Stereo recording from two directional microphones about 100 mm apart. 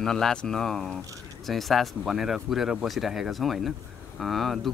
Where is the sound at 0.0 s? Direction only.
5° left (ahead or behind).